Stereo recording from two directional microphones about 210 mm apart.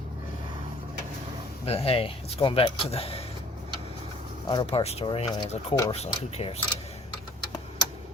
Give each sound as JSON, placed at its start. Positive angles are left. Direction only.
{"t": 1.6, "sound": "speech", "side_deg": 30}
{"t": 4.4, "sound": "speech", "side_deg": 20}